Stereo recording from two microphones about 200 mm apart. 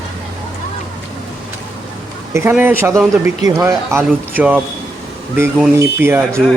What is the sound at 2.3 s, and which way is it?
A man's voice, 10° right (ahead or behind).